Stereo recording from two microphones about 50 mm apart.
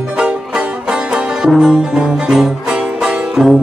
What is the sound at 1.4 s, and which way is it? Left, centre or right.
Music, centre.